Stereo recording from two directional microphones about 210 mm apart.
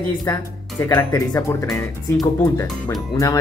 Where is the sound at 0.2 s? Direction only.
15° left (ahead or behind).